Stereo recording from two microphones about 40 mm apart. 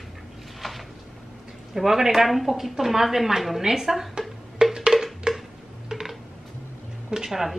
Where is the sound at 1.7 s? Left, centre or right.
Centre.